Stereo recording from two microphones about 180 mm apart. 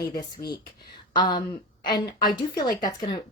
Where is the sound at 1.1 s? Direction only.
25° left (ahead or behind).